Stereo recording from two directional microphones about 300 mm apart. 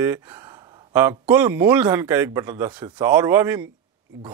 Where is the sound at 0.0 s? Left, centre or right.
Centre.